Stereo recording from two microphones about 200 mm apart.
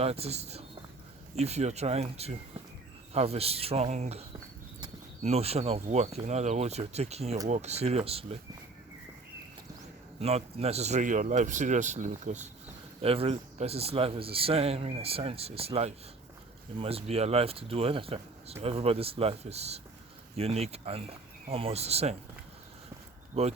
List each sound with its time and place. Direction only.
0.0 s speech: 30° right (ahead or behind)
10.2 s a man's voice: 30° right (ahead or behind)
23.3 s speech: 30° right (ahead or behind)